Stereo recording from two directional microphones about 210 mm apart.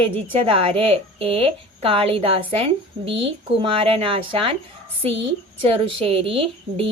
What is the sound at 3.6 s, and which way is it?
Speech, 25° right (ahead or behind).